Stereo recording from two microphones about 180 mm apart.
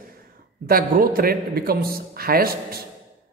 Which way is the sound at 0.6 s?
55° right (ahead or behind).